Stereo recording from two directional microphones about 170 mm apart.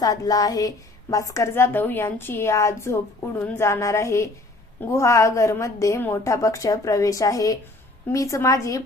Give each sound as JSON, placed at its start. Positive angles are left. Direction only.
{"t": 0.0, "sound": "a woman's voice", "side_deg": 20}